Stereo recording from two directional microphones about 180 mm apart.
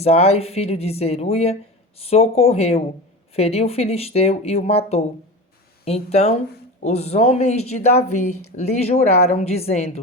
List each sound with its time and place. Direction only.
0.0 s speech: 35° left (ahead or behind)